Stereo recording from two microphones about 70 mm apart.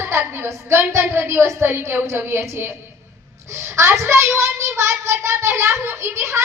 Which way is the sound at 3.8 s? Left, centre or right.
Right.